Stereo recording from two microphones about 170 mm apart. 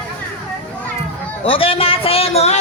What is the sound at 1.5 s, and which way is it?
Speech, 30° left (ahead or behind).